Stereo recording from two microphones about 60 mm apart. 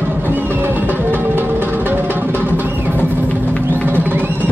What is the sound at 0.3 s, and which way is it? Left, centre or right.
Music, right.